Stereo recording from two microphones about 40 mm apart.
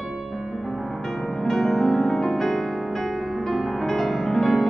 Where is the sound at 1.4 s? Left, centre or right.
Centre.